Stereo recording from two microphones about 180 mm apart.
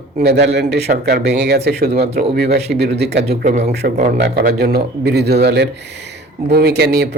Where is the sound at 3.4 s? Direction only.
45° right (ahead or behind).